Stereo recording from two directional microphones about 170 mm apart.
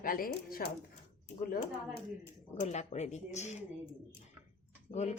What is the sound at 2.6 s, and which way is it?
Speech, 45° left (ahead or behind).